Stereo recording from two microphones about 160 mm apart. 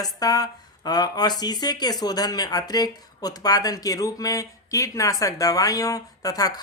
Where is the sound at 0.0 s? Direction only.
25° left (ahead or behind).